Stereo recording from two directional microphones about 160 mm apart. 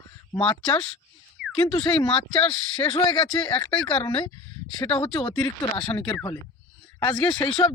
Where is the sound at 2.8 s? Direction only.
25° left (ahead or behind).